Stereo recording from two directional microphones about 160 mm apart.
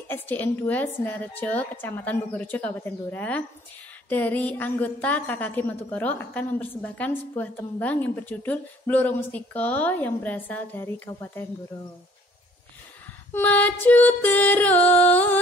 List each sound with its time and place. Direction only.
0.1 s a woman's voice: 10° left (ahead or behind)
13.3 s a woman's voice: 10° left (ahead or behind)